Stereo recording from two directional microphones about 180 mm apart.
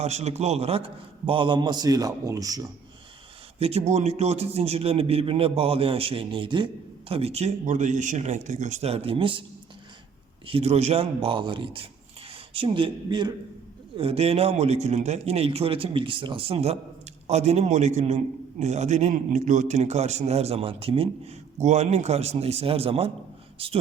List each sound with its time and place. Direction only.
0.0 s a man's voice: 35° right (ahead or behind); by 2.6 s 20° right (ahead or behind)
3.6 s a man's voice: 35° right (ahead or behind)
10.4 s a man's voice: 30° right (ahead or behind)